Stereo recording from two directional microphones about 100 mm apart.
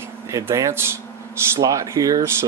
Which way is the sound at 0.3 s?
30° right (ahead or behind).